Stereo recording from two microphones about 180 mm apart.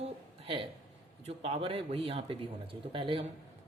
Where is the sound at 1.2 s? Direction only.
35° right (ahead or behind).